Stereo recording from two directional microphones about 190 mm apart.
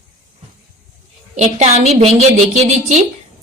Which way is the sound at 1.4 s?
35° right (ahead or behind).